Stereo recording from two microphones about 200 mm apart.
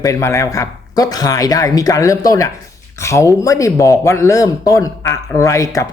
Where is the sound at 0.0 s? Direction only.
15° left (ahead or behind).